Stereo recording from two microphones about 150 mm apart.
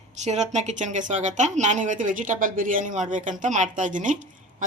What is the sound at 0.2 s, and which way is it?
Speech, 50° right (ahead or behind).